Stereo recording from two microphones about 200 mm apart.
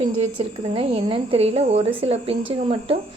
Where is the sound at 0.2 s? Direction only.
30° right (ahead or behind).